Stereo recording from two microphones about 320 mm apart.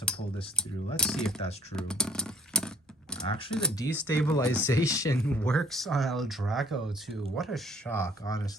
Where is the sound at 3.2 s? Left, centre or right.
Centre.